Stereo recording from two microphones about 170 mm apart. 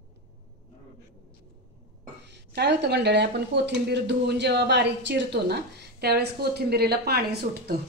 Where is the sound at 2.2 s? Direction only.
85° right.